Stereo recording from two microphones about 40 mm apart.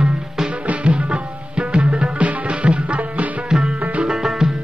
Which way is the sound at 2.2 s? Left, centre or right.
Right.